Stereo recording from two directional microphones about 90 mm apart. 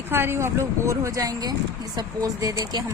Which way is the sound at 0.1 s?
25° right (ahead or behind).